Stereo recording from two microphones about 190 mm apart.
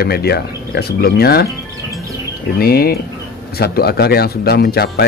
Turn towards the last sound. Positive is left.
turn(degrees=55)  # may be behind; listen again after turning